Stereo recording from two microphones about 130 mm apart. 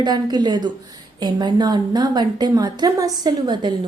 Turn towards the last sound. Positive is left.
turn(degrees=-35)  # may be behind; listen again after turning